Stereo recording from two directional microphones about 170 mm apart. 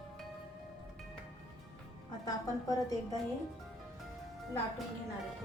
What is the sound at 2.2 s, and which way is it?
Speech, 20° left (ahead or behind).